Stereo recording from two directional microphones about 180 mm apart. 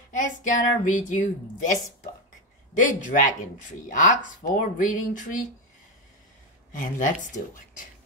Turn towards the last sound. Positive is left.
turn(degrees=50)  # may be behind; listen again after turning